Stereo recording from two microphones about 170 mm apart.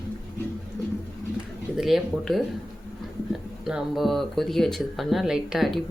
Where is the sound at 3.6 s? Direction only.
5° right (ahead or behind).